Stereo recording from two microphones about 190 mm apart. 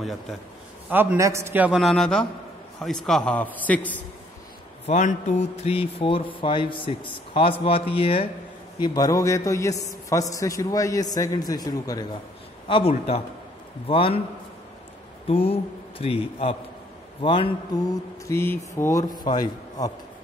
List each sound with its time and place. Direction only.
0.0 s a man's voice: centre (ahead or behind)
0.8 s a man's voice: 10° right (ahead or behind); by 4.0 s 10° left (ahead or behind)
4.8 s a man's voice: 40° left (ahead or behind)
15.2 s a man's voice: 30° left (ahead or behind)